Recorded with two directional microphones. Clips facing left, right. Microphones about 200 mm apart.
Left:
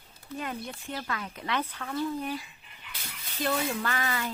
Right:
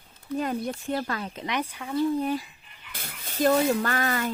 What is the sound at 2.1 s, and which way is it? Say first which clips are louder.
Speech: right 7 dB; 30° right (ahead or behind).